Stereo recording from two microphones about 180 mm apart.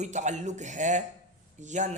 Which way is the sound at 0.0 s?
40° right (ahead or behind).